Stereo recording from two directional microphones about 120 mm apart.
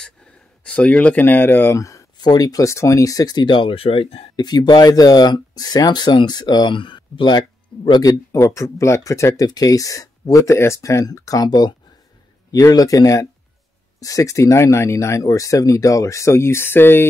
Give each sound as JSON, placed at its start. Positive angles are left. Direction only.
{"t": 0.7, "sound": "speech", "side_deg": 10}
{"t": 4.4, "sound": "speech", "side_deg": 35}